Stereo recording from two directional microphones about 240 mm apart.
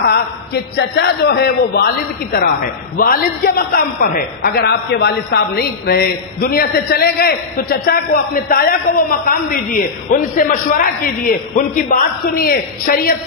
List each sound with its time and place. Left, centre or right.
0.7 s a man's voice: left